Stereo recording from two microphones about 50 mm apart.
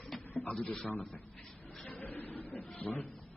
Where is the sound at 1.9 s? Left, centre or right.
Left.